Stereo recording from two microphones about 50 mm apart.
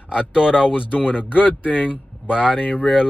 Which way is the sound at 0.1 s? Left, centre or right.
Centre.